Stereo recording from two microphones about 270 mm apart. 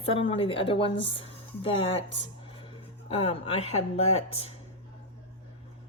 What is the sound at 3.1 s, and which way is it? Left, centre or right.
A woman's voice, left.